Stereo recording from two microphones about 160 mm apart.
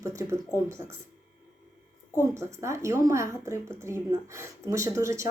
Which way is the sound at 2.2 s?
20° right (ahead or behind).